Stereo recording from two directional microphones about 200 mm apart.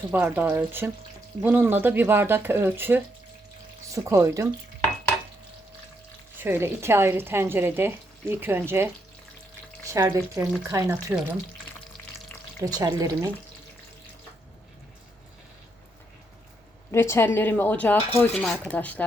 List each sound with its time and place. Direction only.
0.1 s speech: 10° right (ahead or behind)
6.4 s speech: 10° right (ahead or behind)
12.6 s speech: 15° right (ahead or behind)
16.9 s a woman's voice: 15° left (ahead or behind)